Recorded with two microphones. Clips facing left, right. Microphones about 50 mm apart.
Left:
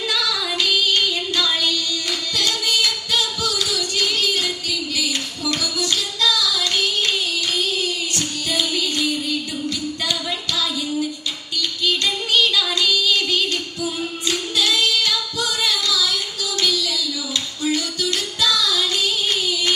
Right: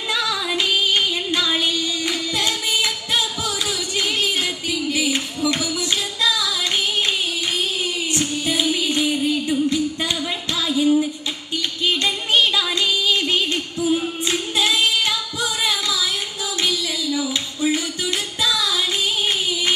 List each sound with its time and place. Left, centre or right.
0.1 s female singing: right
3.4 s singing: right
8.2 s music: right
10.7 s female singing: right
11.5 s music: right
16.6 s a sound: right
18.4 s music: right